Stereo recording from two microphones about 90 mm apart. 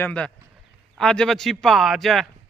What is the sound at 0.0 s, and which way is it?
A man's voice, 15° left (ahead or behind).